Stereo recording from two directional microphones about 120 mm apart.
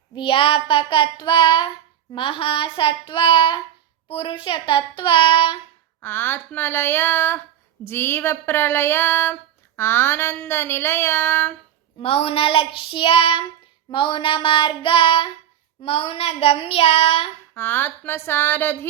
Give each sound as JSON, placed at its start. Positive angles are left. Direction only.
{"t": 0.1, "sound": "child singing", "side_deg": 45}
{"t": 6.0, "sound": "speech", "side_deg": 20}
{"t": 11.9, "sound": "child singing", "side_deg": 50}
{"t": 17.5, "sound": "speech", "side_deg": 20}